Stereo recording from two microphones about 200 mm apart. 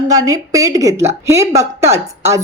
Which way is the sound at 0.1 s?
15° right (ahead or behind).